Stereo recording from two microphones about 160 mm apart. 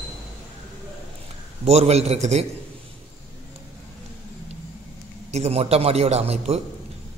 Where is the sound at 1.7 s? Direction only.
40° right (ahead or behind).